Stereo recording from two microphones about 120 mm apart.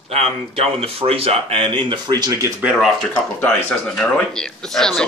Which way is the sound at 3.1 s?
15° left (ahead or behind).